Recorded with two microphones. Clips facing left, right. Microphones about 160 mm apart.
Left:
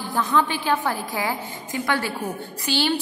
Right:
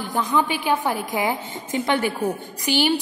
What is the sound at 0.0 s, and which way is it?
A woman's voice, 15° right (ahead or behind).